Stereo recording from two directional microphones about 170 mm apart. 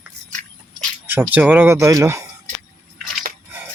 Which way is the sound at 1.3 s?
10° right (ahead or behind).